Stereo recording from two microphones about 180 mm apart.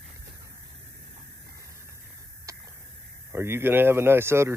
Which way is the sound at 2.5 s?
15° right (ahead or behind).